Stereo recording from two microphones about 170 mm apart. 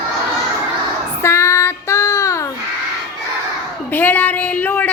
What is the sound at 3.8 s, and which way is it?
Speech, 10° left (ahead or behind).